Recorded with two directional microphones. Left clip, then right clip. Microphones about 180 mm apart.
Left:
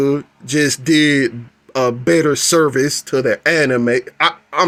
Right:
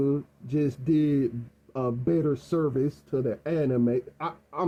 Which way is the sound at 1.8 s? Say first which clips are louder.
Left 13 dB; 45° left (ahead or behind).